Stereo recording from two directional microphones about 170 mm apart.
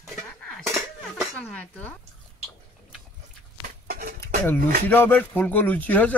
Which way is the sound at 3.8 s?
60° right (ahead or behind).